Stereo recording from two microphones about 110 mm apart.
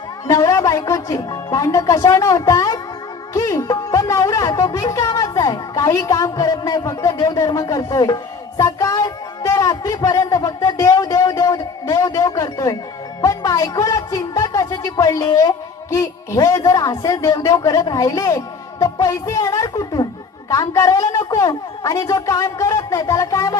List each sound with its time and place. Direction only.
0.3 s a woman's voice: 30° left (ahead or behind)